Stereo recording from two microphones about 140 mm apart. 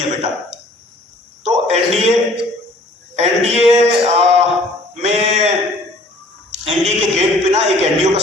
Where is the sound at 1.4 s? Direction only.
50° right (ahead or behind).